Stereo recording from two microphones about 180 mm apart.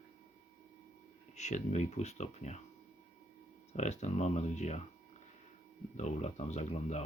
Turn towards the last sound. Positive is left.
turn(degrees=40)  # may be behind; listen again after turning